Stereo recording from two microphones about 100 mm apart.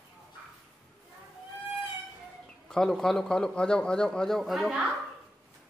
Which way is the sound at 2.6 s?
5° left (ahead or behind).